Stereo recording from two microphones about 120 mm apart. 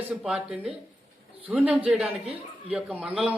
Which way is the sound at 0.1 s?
5° right (ahead or behind).